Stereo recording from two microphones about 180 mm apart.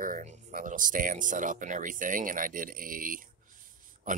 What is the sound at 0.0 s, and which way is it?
Speech, 45° right (ahead or behind).